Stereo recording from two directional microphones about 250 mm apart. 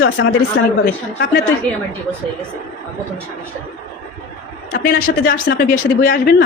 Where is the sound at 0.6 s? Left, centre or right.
Left.